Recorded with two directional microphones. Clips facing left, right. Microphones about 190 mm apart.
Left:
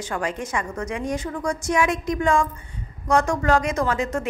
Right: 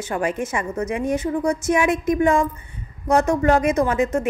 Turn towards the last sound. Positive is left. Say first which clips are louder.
# right 4 dB
turn(degrees=-20)  # may be behind; listen again after turning